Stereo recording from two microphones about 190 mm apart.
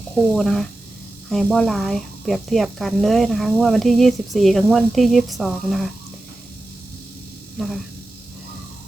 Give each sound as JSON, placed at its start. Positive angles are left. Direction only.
{"t": 0.3, "sound": "speech", "side_deg": 0}
{"t": 7.6, "sound": "speech", "side_deg": 0}